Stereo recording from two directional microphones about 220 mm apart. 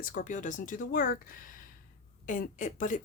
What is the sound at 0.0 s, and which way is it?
A woman's voice, 40° left (ahead or behind).